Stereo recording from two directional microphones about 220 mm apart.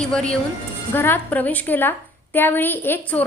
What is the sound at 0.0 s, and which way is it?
A woman's voice, 5° left (ahead or behind).